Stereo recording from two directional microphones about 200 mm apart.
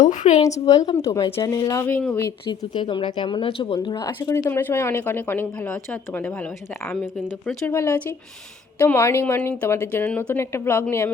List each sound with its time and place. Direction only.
0.0 s a woman's voice: 40° left (ahead or behind)
0.6 s speech: 20° left (ahead or behind)
2.9 s speech: 25° left (ahead or behind)